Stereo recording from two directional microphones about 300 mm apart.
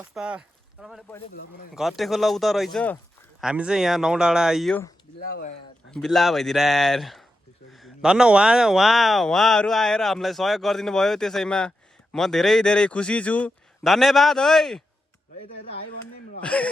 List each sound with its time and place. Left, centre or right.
0.0 s speech: centre
1.3 s speech: left
1.7 s speech: centre
5.3 s speech: left
5.9 s speech: centre
16.4 s speech: centre